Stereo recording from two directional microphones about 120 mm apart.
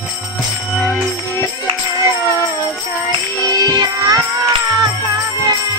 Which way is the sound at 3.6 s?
35° right (ahead or behind).